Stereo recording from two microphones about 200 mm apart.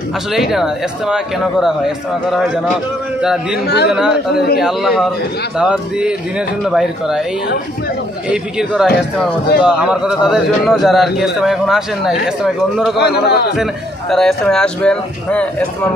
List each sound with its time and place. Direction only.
0.3 s a man's voice: centre (ahead or behind)
3.6 s speech: 55° left (ahead or behind)
3.9 s a man's voice: 5° right (ahead or behind)
8.3 s a man's voice: 5° right (ahead or behind)
12.9 s a man's voice: 55° left (ahead or behind)
13.6 s a man's voice: centre (ahead or behind)